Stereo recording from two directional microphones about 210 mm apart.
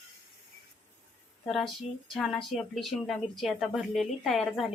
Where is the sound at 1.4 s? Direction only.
Centre (ahead or behind).